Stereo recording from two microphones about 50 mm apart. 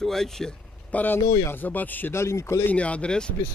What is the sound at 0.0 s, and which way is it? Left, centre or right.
Speech, centre.